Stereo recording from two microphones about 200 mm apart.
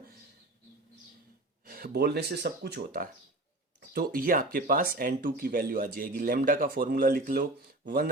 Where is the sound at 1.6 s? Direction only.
45° right (ahead or behind).